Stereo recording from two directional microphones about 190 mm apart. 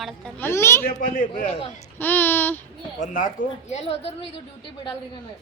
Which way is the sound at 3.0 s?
45° left (ahead or behind).